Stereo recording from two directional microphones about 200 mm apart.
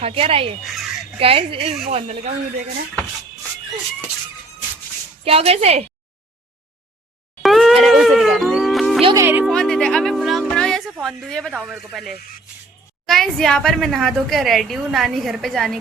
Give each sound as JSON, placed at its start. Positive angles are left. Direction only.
{"t": 0.0, "sound": "speech", "side_deg": -30}
{"t": 0.6, "sound": "a woman's voice", "side_deg": 0}
{"t": 1.2, "sound": "speech", "side_deg": -25}
{"t": 5.2, "sound": "speech", "side_deg": -30}
{"t": 7.4, "sound": "music", "side_deg": 0}
{"t": 9.0, "sound": "music", "side_deg": -15}
{"t": 9.5, "sound": "music", "side_deg": 5}
{"t": 11.0, "sound": "a woman's voice", "side_deg": 5}